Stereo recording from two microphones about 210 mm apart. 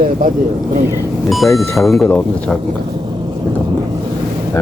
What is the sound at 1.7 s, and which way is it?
Speech, centre (ahead or behind).